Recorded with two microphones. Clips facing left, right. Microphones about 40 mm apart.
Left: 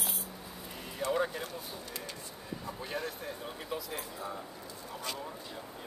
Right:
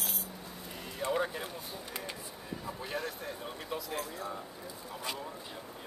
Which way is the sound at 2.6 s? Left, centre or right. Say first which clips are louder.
Even; centre.